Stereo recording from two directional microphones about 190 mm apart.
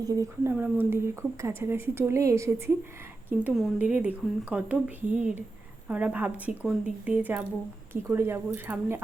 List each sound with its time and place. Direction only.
0.0 s a woman's voice: 15° right (ahead or behind)
3.2 s a woman's voice: 5° right (ahead or behind)